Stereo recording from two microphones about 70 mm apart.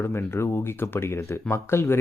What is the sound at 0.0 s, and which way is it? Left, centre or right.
Speech, left.